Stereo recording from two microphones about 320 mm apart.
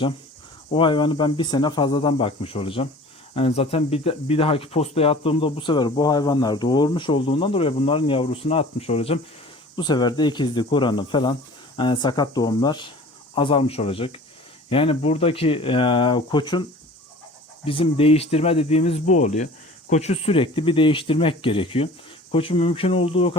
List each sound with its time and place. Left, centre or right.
0.7 s speech: centre
17.7 s speech: centre